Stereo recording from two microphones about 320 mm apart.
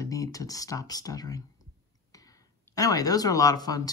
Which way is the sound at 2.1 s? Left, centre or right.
Centre.